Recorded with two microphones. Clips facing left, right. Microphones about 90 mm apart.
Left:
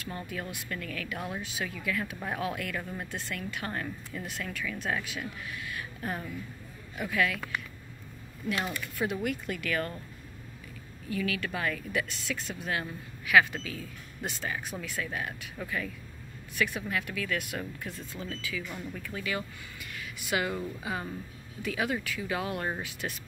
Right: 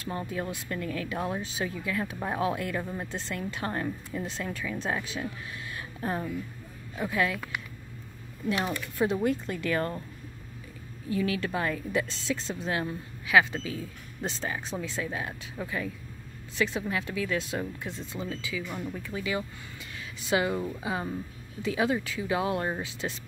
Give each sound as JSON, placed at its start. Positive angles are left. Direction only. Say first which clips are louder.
{"t": 0.0, "sound": "speech", "louder": "right 4 dB", "side_deg": -30}
{"t": 8.5, "sound": "speech", "louder": "right 3 dB", "side_deg": -25}
{"t": 11.1, "sound": "speech", "louder": "right 4 dB", "side_deg": -30}